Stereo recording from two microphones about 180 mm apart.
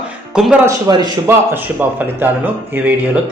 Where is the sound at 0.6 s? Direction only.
20° right (ahead or behind).